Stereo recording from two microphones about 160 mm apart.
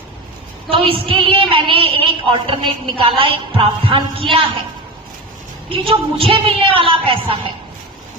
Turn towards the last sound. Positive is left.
turn(degrees=-35)  # may be behind; listen again after turning